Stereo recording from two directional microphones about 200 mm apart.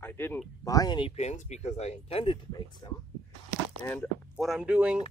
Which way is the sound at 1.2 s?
35° left (ahead or behind).